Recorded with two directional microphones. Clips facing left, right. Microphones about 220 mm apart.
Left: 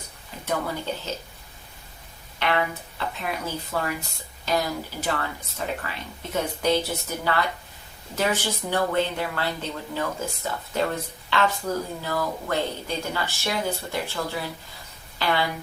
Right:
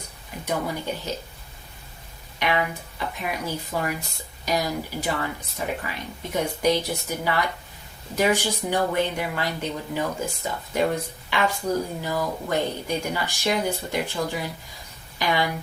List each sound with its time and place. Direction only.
0.4 s speech: 15° right (ahead or behind)
2.4 s speech: 15° right (ahead or behind)